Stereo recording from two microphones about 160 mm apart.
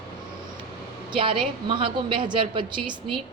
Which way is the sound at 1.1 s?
30° right (ahead or behind).